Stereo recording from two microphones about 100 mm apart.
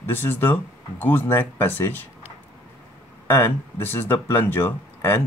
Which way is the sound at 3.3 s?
25° left (ahead or behind).